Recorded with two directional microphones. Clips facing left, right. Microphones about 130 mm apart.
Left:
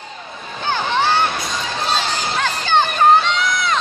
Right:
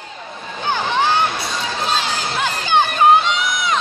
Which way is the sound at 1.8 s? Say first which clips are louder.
Left 1 dB; 5° right (ahead or behind).